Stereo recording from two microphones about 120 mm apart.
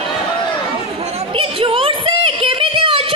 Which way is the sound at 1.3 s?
50° right (ahead or behind).